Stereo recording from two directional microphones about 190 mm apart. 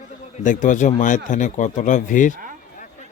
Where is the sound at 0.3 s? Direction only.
40° left (ahead or behind).